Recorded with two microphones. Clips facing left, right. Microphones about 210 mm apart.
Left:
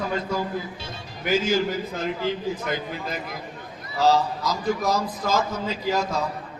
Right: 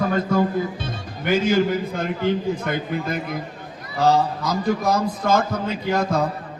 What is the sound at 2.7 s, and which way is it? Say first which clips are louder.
A man's voice: right 5 dB; 55° right (ahead or behind).